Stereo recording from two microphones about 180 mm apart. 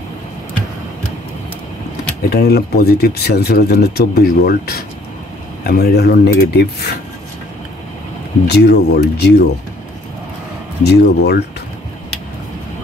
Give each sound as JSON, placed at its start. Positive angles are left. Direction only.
{"t": 2.2, "sound": "speech", "side_deg": 60}
{"t": 8.5, "sound": "speech", "side_deg": 65}
{"t": 10.8, "sound": "speech", "side_deg": 65}